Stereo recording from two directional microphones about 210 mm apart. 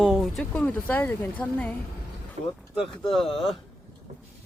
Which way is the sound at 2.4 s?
30° right (ahead or behind).